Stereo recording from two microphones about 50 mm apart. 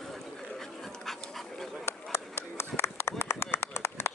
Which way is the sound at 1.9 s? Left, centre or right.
Left.